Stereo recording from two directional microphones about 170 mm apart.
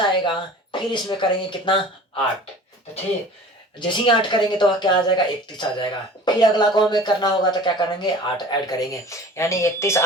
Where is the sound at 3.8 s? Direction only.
25° left (ahead or behind).